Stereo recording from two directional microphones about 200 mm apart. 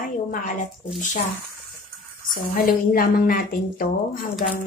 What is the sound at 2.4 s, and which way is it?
A woman's voice, 45° left (ahead or behind).